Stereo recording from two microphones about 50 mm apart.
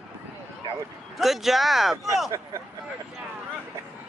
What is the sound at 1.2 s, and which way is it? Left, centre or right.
Speech, centre.